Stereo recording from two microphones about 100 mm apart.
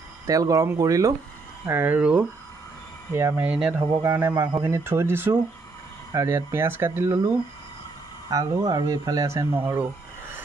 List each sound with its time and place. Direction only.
0.3 s speech: 35° right (ahead or behind)
1.7 s speech: 20° right (ahead or behind)
3.1 s speech: 25° right (ahead or behind)
3.4 s speech: 10° right (ahead or behind)
4.0 s speech: 20° right (ahead or behind)
8.3 s speech: 40° right (ahead or behind)